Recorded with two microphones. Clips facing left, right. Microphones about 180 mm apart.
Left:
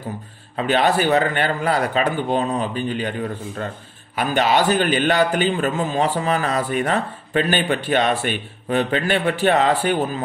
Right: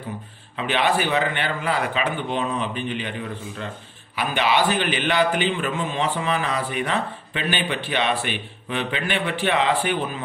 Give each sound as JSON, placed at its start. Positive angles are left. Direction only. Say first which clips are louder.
{"t": 0.6, "sound": "a man's voice", "louder": "left 4 dB", "side_deg": 40}